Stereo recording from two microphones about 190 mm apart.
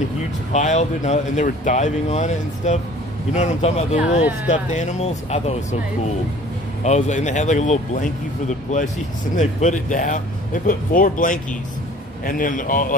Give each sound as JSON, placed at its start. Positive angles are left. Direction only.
{"t": 0.5, "sound": "speech", "side_deg": 35}
{"t": 6.8, "sound": "speech", "side_deg": 40}
{"t": 9.4, "sound": "speech", "side_deg": 40}